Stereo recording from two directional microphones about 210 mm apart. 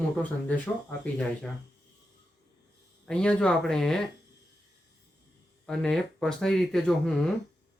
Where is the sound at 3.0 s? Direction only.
5° left (ahead or behind).